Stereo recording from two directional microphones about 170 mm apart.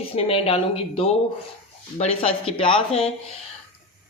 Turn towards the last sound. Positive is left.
turn(degrees=30)  # may be behind; listen again after turning